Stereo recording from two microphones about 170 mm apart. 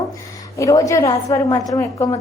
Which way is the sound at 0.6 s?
20° left (ahead or behind).